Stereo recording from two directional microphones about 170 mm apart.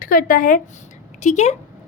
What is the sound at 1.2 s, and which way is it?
Speech, 45° left (ahead or behind).